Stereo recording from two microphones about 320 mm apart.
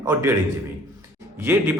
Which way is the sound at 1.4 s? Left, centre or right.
Centre.